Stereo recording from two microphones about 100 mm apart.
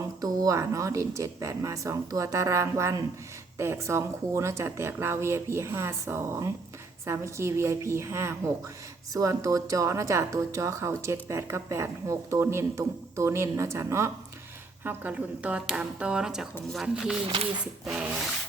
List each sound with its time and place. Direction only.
0.2 s speech: 35° right (ahead or behind)
14.8 s speech: 15° right (ahead or behind)